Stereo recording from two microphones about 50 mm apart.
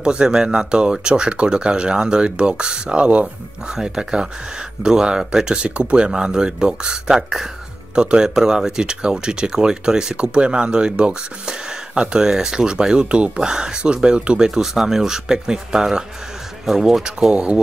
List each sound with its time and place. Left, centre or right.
0.0 s speech: centre
3.6 s speech: centre
14.5 s speech: centre